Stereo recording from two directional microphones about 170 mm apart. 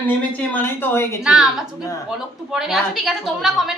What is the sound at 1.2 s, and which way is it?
A woman's voice, 5° right (ahead or behind).